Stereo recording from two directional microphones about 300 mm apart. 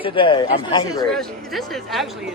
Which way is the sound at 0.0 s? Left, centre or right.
Centre.